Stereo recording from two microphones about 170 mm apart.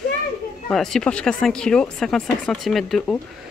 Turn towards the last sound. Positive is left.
turn(degrees=0)  # may be behind; listen again after turning